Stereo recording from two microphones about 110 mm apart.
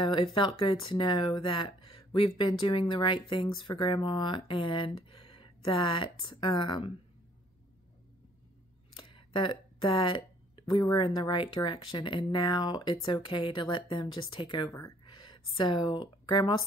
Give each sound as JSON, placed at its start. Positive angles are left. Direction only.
{"t": 0.0, "sound": "speech", "side_deg": 50}
{"t": 8.9, "sound": "a sound", "side_deg": 50}
{"t": 10.7, "sound": "speech", "side_deg": 45}